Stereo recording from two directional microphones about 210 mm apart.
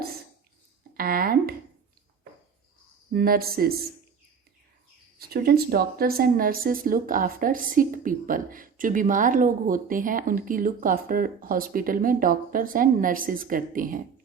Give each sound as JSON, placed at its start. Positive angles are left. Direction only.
{"t": 0.9, "sound": "speech", "side_deg": -45}
{"t": 3.1, "sound": "speech", "side_deg": -45}
{"t": 5.3, "sound": "a woman's voice", "side_deg": -50}